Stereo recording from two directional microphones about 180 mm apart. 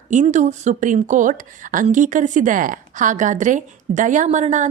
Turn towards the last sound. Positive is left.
turn(degrees=-40)  # may be behind; listen again after turning